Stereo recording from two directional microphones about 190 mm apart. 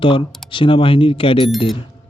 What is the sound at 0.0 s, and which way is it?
Speech, 25° left (ahead or behind).